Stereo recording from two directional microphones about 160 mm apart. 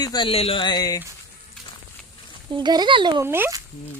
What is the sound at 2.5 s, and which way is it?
Speech, 25° right (ahead or behind).